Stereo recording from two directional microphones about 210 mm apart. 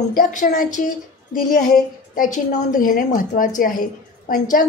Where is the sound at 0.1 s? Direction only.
40° left (ahead or behind).